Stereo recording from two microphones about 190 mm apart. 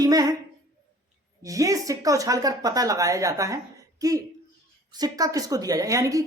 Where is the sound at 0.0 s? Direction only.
20° right (ahead or behind).